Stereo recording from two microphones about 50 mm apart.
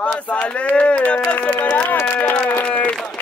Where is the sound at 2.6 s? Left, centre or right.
Left.